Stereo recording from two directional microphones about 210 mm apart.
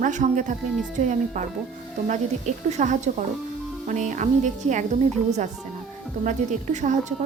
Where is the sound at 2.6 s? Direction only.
35° right (ahead or behind).